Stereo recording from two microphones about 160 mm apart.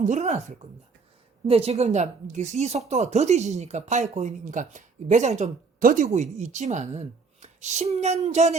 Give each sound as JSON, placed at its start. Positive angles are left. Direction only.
{"t": 0.0, "sound": "speech", "side_deg": -45}